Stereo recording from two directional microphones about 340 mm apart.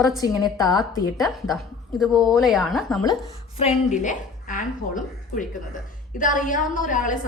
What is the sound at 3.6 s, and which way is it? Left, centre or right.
A woman's voice, centre.